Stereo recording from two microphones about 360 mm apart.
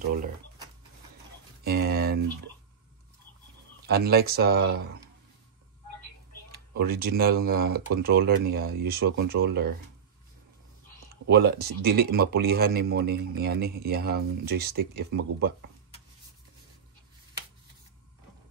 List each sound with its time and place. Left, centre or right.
0.0 s speech: right
1.6 s a sound: right
3.8 s speech: right
6.7 s speech: right
11.2 s speech: right